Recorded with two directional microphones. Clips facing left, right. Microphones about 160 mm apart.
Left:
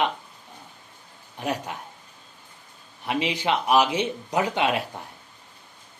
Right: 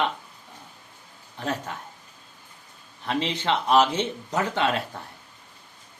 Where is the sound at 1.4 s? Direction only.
15° left (ahead or behind).